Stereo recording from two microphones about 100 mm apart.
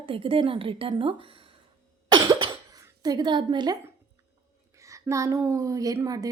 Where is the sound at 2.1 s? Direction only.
55° right (ahead or behind).